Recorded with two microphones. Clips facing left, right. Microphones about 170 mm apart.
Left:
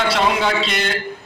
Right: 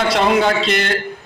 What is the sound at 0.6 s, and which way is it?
Speech, centre (ahead or behind).